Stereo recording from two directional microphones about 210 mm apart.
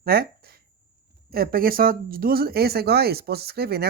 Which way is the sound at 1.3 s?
45° right (ahead or behind).